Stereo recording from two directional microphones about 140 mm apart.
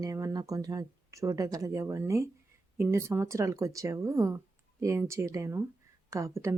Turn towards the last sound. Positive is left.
turn(degrees=-20)  # may be behind; listen again after turning